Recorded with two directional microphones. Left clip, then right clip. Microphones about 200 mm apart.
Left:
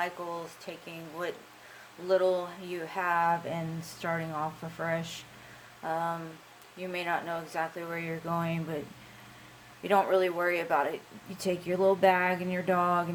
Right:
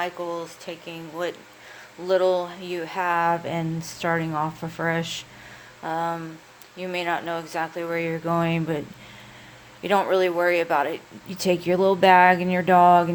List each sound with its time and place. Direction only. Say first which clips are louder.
0.0 s speech: right 6 dB; 40° right (ahead or behind)
9.8 s speech: right 5 dB; 45° right (ahead or behind)